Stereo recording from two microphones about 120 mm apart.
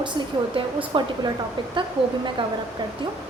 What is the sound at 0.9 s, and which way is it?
Speech, 45° right (ahead or behind).